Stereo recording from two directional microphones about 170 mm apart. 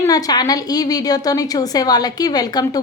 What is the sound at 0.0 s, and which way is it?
A woman's voice, 20° left (ahead or behind).